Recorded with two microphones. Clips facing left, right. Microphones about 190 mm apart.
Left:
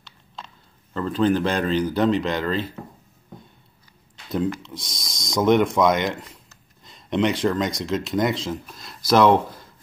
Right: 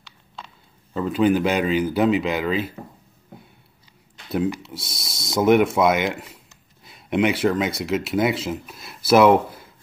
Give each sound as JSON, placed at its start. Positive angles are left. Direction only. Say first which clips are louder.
{"t": 0.9, "sound": "speech", "louder": "right 2 dB", "side_deg": -10}
{"t": 4.3, "sound": "speech", "louder": "right 1 dB", "side_deg": -10}